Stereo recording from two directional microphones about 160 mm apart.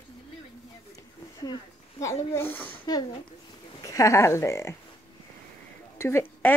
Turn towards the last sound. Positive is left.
turn(degrees=15)  # may be behind; listen again after turning